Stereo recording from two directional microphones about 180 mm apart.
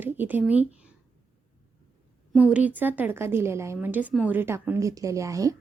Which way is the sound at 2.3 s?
5° right (ahead or behind).